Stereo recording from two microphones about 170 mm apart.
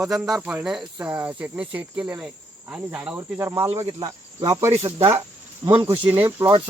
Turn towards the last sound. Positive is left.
turn(degrees=-15)  # may be behind; listen again after turning